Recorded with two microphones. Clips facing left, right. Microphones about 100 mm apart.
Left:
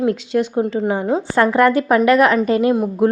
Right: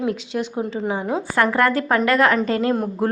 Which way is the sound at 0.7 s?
60° left (ahead or behind).